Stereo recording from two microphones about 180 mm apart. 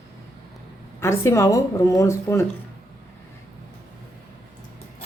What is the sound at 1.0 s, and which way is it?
Speech, 15° left (ahead or behind).